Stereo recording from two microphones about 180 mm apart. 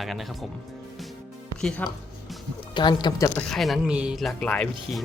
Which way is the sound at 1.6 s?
5° left (ahead or behind).